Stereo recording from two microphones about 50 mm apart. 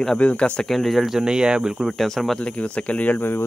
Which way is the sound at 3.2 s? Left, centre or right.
Left.